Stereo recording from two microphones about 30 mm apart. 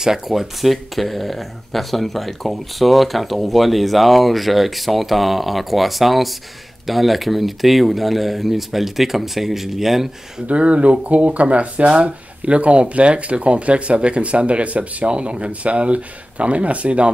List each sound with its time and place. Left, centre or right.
0.3 s speech: centre
10.4 s speech: right